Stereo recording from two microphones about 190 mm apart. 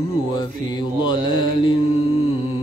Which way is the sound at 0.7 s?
25° left (ahead or behind).